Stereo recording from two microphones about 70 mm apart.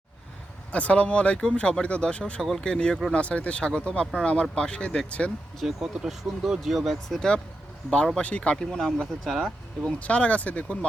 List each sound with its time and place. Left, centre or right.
0.7 s speech: centre
5.5 s speech: centre
10.0 s speech: centre